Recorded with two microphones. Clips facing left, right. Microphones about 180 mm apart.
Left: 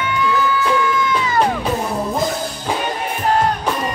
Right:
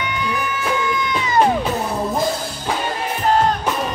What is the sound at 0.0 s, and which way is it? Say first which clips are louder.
Music: left 5 dB; 20° right (ahead or behind).